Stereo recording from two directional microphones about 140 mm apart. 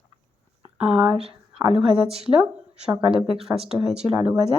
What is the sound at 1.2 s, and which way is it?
Speech, 45° right (ahead or behind).